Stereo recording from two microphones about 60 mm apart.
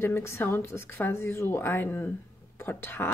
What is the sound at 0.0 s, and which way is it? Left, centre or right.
Speech, left.